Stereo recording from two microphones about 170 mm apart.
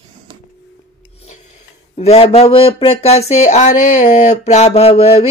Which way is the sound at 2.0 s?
35° left (ahead or behind).